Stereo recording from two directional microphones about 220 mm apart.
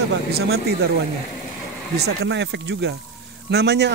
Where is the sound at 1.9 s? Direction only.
50° right (ahead or behind).